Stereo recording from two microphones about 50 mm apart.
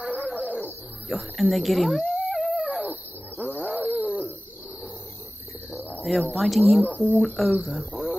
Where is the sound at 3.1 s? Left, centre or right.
Left.